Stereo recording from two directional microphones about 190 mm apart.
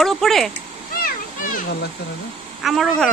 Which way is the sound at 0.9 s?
50° left (ahead or behind).